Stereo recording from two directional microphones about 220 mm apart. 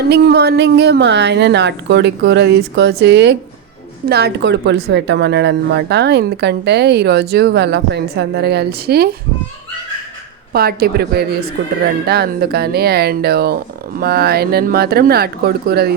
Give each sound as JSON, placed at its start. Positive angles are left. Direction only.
{"t": 0.0, "sound": "speech", "side_deg": -45}
{"t": 10.5, "sound": "speech", "side_deg": -45}